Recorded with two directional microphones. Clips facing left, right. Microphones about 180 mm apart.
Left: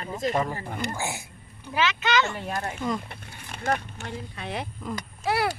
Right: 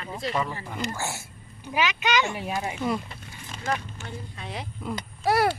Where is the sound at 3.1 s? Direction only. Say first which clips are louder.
Even; 60° left (ahead or behind).